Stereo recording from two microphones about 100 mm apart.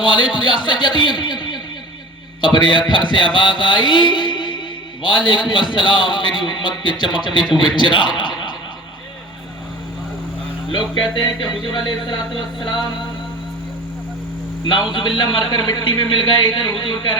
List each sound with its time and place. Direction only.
0.0 s a man's voice: 55° left (ahead or behind)
10.7 s a man's voice: 50° left (ahead or behind)
15.2 s a man's voice: 50° left (ahead or behind)